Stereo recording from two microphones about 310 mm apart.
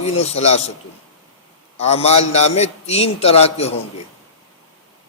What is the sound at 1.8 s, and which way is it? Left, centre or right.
A man's voice, left.